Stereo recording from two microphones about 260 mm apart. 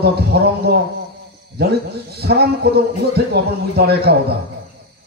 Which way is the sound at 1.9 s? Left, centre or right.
Right.